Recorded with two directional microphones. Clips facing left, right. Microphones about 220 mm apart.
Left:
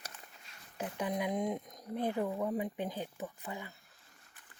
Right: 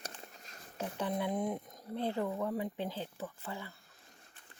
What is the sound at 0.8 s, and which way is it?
Speech, 15° left (ahead or behind).